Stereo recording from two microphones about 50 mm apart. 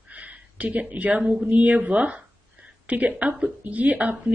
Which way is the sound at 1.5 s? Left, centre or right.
Right.